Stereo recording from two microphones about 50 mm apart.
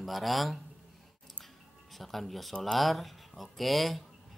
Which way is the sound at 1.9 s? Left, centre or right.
Centre.